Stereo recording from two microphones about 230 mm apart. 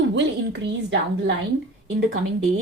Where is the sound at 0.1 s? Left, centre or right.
Right.